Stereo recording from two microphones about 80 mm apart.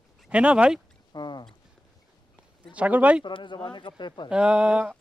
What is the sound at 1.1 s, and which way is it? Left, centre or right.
Speech, left.